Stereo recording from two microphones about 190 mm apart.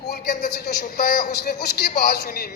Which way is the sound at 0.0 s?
60° left (ahead or behind).